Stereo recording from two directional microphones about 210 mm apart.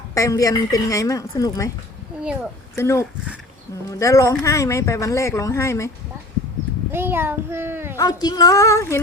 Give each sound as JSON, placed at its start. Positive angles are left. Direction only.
{"t": 0.1, "sound": "speech", "side_deg": 15}
{"t": 2.7, "sound": "speech", "side_deg": 10}
{"t": 6.9, "sound": "a child's voice", "side_deg": -10}
{"t": 7.9, "sound": "speech", "side_deg": 20}